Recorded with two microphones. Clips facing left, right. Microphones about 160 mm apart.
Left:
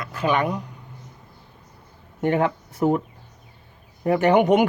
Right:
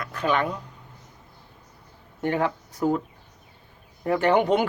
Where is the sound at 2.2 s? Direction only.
20° left (ahead or behind).